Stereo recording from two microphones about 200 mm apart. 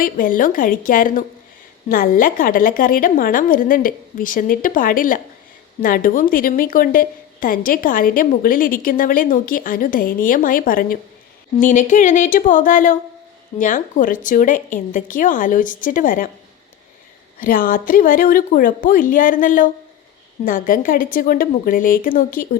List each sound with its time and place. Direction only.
0.0 s a woman's voice: 45° left (ahead or behind)
17.4 s a woman's voice: 45° left (ahead or behind)